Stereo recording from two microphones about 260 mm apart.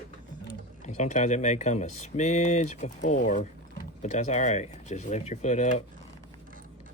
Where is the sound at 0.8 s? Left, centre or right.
Left.